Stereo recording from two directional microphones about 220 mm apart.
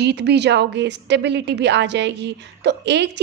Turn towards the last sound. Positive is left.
turn(degrees=-50)  # may be behind; listen again after turning